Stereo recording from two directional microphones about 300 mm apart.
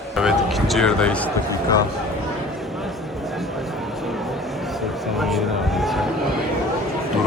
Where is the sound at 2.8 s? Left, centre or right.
Centre.